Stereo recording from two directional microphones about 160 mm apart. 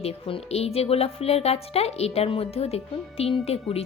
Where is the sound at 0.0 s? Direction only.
40° left (ahead or behind).